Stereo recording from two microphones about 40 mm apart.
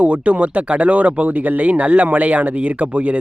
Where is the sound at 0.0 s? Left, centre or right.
Right.